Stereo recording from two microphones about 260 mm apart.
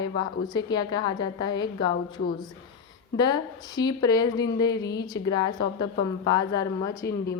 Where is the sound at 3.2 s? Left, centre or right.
Centre.